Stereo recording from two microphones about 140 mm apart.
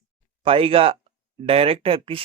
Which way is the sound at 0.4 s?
40° right (ahead or behind).